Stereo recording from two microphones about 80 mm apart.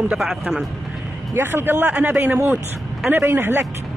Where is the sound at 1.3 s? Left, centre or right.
Right.